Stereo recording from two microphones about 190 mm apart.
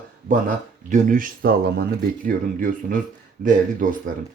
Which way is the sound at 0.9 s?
40° right (ahead or behind).